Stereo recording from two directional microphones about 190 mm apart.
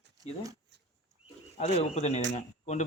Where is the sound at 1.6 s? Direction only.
35° left (ahead or behind).